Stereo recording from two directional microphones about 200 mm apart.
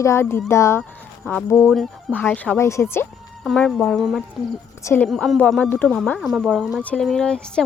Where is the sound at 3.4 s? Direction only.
Centre (ahead or behind).